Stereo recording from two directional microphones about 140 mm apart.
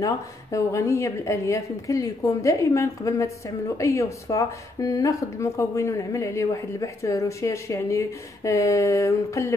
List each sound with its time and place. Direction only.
0.0 s a woman's voice: 20° left (ahead or behind)